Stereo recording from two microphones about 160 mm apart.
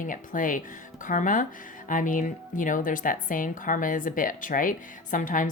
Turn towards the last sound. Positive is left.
turn(degrees=55)  # may be behind; listen again after turning